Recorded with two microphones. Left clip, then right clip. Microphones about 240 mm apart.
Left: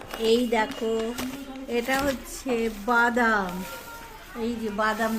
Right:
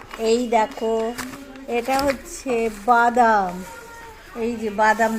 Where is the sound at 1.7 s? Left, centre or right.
Centre.